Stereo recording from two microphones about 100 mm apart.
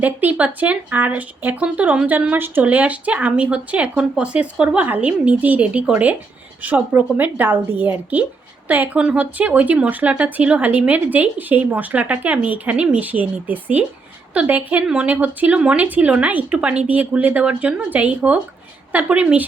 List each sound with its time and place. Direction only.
0.0 s speech: 15° right (ahead or behind)